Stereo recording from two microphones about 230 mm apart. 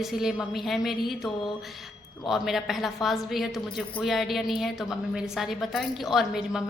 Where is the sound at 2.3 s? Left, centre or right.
Centre.